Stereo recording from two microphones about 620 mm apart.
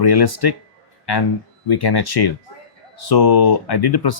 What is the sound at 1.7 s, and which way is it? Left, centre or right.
Speech, left.